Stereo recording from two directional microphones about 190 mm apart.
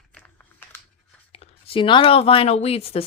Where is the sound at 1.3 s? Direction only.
30° left (ahead or behind).